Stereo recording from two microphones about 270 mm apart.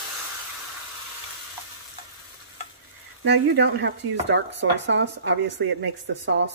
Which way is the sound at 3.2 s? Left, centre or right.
Right.